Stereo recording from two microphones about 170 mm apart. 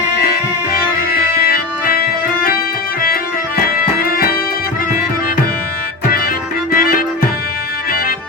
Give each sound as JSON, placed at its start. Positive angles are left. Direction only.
{"t": 1.1, "sound": "music", "side_deg": 65}
{"t": 4.0, "sound": "music", "side_deg": 60}
{"t": 6.7, "sound": "music", "side_deg": 60}